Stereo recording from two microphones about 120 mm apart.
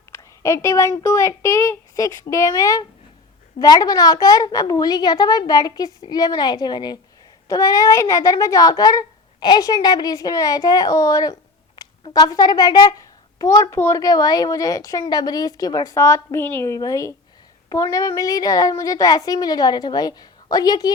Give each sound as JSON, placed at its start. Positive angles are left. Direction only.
{"t": 0.1, "sound": "a woman's voice", "side_deg": 25}